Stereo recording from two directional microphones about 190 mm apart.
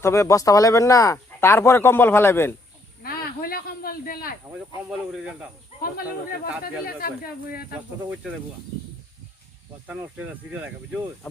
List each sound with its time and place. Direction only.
0.0 s speech: 15° left (ahead or behind)
3.0 s snake: 50° left (ahead or behind)
4.9 s speech: centre (ahead or behind)
5.8 s speech: 50° left (ahead or behind)
7.7 s speech: 5° right (ahead or behind)
9.8 s speech: 10° right (ahead or behind)